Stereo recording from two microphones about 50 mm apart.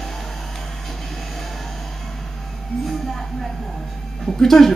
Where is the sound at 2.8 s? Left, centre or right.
Centre.